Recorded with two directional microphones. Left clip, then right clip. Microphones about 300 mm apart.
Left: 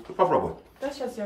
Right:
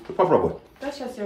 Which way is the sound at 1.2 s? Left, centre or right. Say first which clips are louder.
Right 4 dB; centre.